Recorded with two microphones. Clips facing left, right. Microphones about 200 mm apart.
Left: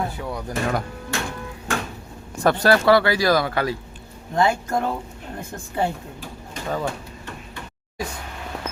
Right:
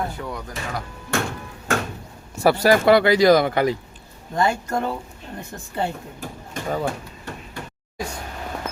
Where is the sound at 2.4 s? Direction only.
10° right (ahead or behind).